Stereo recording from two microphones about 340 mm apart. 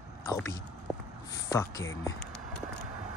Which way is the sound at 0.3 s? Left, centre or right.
Centre.